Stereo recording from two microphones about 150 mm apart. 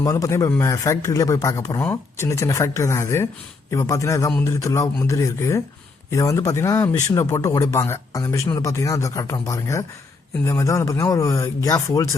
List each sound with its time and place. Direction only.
0.0 s speech: 20° left (ahead or behind)